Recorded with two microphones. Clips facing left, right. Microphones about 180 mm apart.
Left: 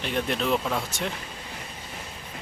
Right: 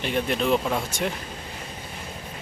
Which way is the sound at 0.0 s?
Centre (ahead or behind).